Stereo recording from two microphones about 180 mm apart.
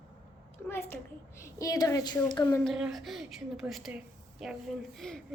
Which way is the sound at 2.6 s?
Centre (ahead or behind).